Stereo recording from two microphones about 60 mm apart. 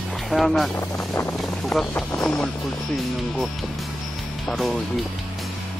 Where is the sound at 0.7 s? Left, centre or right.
Left.